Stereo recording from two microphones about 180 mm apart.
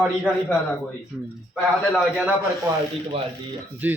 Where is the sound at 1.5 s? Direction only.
Centre (ahead or behind).